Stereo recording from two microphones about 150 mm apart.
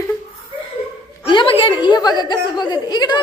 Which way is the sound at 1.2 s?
35° left (ahead or behind).